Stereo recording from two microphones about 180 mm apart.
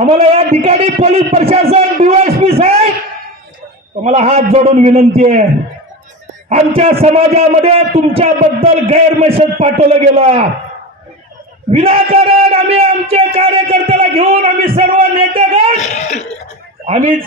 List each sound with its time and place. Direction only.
0.0 s a man's voice: 35° right (ahead or behind)
4.0 s a man's voice: 35° right (ahead or behind)
6.5 s a man's voice: 35° right (ahead or behind)
11.7 s a man's voice: 35° right (ahead or behind)
15.8 s throat clearing: 40° left (ahead or behind)